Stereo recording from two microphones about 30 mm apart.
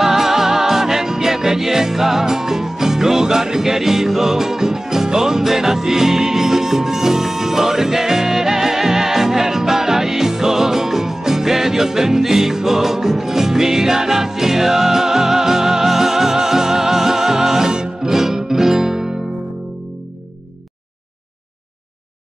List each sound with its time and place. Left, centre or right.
0.0 s music: centre